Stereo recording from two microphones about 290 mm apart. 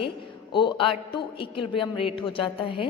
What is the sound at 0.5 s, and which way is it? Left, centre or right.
A woman's voice, centre.